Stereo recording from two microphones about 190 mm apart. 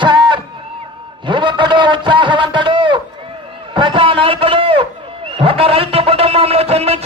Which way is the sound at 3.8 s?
25° right (ahead or behind).